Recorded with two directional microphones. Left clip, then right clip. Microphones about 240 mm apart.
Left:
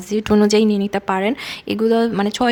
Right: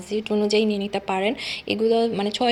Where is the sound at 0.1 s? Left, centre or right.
Left.